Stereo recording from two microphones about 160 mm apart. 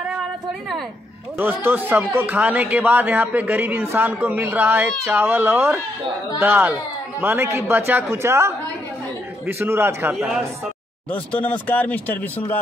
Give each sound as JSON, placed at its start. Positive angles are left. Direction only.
{"t": 1.4, "sound": "speech", "side_deg": -10}
{"t": 10.1, "sound": "speech", "side_deg": 0}